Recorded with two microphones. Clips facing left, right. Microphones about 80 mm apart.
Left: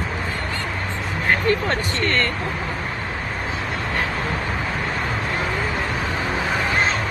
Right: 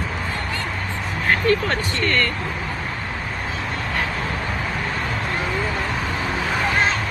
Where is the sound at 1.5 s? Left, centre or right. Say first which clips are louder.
Right 1 dB; left.